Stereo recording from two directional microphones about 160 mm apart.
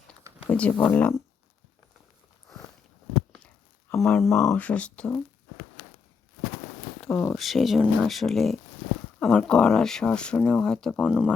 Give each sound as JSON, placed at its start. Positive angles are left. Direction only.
{"t": 0.4, "sound": "speech", "side_deg": 10}
{"t": 3.3, "sound": "a sound", "side_deg": 5}
{"t": 4.2, "sound": "speech", "side_deg": 0}
{"t": 7.1, "sound": "speech", "side_deg": 15}
{"t": 7.3, "sound": "speech", "side_deg": 0}